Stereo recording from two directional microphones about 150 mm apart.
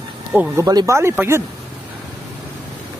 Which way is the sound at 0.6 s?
20° right (ahead or behind).